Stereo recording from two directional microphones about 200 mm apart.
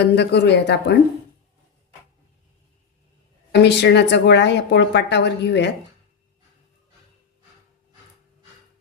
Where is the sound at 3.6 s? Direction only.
55° left (ahead or behind).